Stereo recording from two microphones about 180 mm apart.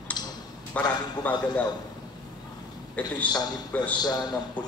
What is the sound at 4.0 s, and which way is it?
Speech, 20° left (ahead or behind).